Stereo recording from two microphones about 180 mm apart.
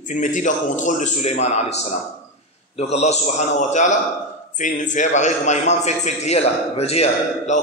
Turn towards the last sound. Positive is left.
turn(degrees=40)  # may be behind; listen again after turning